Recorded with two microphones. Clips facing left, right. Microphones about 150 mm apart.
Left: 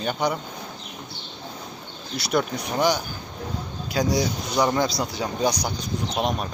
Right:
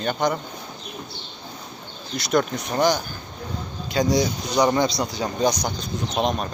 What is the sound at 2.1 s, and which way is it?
Speech, 5° left (ahead or behind).